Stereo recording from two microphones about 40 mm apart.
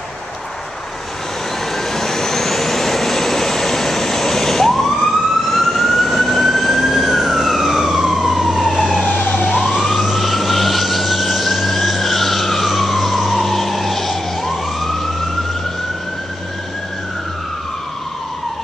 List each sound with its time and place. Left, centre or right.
1.8 s vehicle: centre
9.1 s emergency vehicle: left
9.5 s emergency vehicle: centre